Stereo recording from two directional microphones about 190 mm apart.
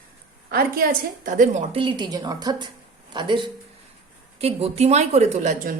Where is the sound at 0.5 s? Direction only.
50° right (ahead or behind).